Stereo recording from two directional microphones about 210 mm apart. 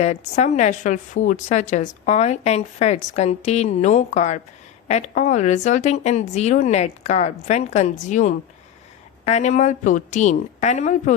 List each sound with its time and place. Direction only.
0.0 s a woman's voice: 35° left (ahead or behind)